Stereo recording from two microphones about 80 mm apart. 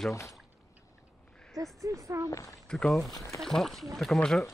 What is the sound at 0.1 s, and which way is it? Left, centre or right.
Speech, left.